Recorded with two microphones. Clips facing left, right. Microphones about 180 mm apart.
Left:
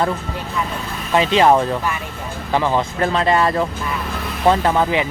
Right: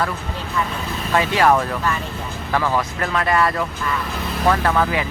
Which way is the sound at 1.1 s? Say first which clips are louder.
Left 3 dB; 20° left (ahead or behind).